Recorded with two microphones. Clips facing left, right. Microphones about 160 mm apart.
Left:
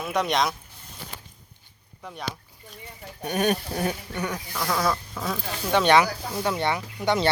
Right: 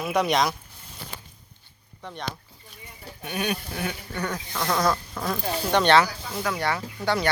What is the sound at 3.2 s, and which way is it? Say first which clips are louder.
Speech: left 5 dB; 45° left (ahead or behind).